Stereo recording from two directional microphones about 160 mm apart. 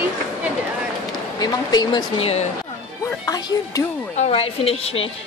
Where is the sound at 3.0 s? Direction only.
20° left (ahead or behind).